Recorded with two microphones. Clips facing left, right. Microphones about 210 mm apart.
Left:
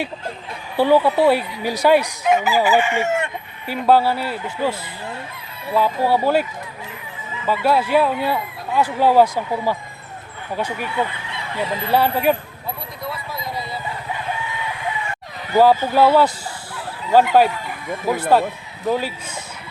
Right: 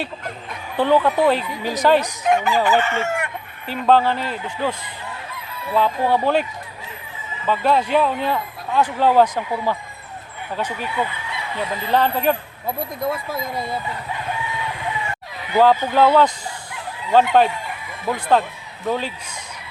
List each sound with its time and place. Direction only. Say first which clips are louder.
0.8 s fowl: left 2 dB; 10° left (ahead or behind)
3.7 s fowl: left 1 dB; 10° left (ahead or behind)
5.7 s fowl: left 1 dB; 10° left (ahead or behind)
7.4 s fowl: even; 10° left (ahead or behind)
11.9 s fowl: left 1 dB; 10° left (ahead or behind)
13.0 s speech: right 5 dB; 50° right (ahead or behind)
15.6 s fowl: left 1 dB; 10° left (ahead or behind)
16.7 s chicken: left 1 dB; 5° left (ahead or behind)
18.1 s fowl: left 2 dB; 5° left (ahead or behind)